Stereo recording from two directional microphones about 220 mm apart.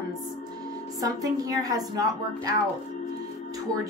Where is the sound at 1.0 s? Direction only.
15° right (ahead or behind).